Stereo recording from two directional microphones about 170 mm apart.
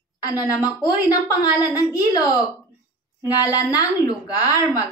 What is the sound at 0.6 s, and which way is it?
A woman's voice, 20° left (ahead or behind).